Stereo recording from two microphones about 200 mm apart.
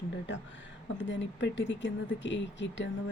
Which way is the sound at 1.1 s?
65° left (ahead or behind).